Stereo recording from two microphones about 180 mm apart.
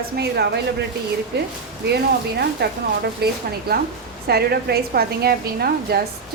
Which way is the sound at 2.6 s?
70° right (ahead or behind).